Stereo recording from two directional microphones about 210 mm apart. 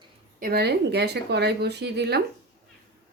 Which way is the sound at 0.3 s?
45° right (ahead or behind).